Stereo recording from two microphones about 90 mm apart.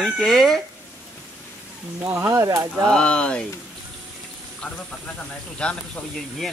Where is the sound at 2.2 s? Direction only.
35° right (ahead or behind).